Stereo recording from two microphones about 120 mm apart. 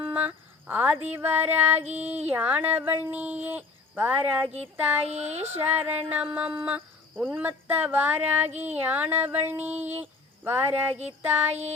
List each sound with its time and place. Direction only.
0.0 s a sound: 15° right (ahead or behind)
1.0 s speech: 15° right (ahead or behind)
5.0 s speech: 65° right (ahead or behind)
5.5 s speech: 15° right (ahead or behind)